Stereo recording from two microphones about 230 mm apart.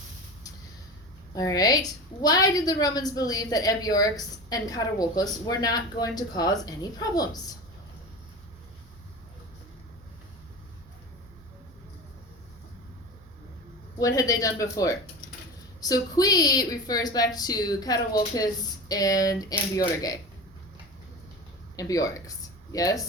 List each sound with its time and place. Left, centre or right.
1.3 s a woman's voice: centre
14.0 s a woman's voice: centre
21.8 s speech: centre